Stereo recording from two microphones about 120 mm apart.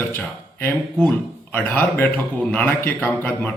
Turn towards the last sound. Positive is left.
turn(degrees=15)  # may be behind; listen again after turning